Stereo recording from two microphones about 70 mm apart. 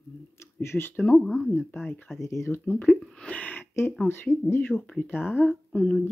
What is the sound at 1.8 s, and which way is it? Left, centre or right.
Speech, left.